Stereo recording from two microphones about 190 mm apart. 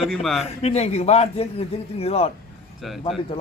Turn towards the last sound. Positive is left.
turn(degrees=30)  # may be behind; listen again after turning